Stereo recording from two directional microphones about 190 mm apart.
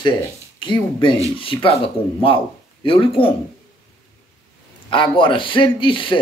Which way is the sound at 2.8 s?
30° left (ahead or behind).